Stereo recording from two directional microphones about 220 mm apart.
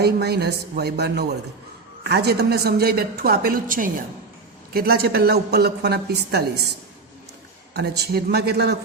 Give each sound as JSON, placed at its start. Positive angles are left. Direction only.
{"t": 0.0, "sound": "a woman's voice", "side_deg": -45}
{"t": 7.7, "sound": "a woman's voice", "side_deg": -50}